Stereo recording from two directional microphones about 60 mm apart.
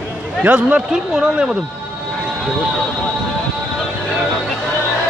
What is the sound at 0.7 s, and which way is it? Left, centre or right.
Speech, centre.